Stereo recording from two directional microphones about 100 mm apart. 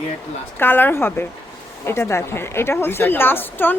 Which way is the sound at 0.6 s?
20° left (ahead or behind).